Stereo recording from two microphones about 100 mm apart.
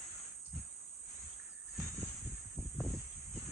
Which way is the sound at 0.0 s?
Centre (ahead or behind).